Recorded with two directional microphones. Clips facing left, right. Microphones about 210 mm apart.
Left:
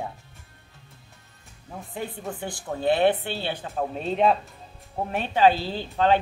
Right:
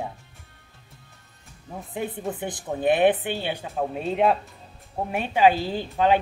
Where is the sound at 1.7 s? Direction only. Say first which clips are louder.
Right 3 dB; 20° right (ahead or behind).